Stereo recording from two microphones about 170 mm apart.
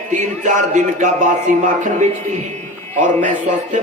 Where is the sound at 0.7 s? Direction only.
45° right (ahead or behind).